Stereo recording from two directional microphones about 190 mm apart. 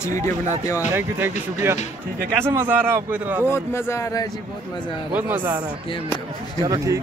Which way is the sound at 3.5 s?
15° left (ahead or behind).